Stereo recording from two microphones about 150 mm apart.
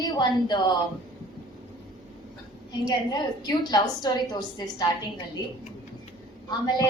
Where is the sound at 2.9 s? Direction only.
30° left (ahead or behind).